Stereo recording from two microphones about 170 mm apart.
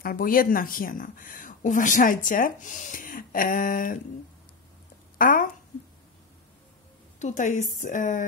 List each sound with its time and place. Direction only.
0.0 s speech: 55° left (ahead or behind)
5.1 s speech: 55° left (ahead or behind)
7.2 s a woman's voice: 45° left (ahead or behind)